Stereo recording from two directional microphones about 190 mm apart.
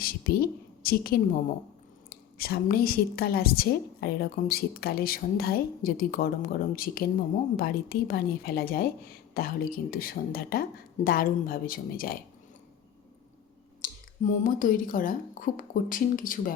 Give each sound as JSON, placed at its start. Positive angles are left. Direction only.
{"t": 0.0, "sound": "a woman's voice", "side_deg": 50}
{"t": 13.8, "sound": "a woman's voice", "side_deg": 45}